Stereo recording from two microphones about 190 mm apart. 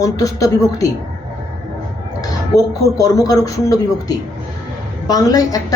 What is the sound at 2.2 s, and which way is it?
A man's voice, 20° left (ahead or behind).